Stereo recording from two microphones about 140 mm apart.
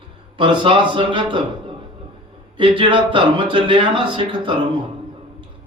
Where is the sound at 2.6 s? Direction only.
35° right (ahead or behind).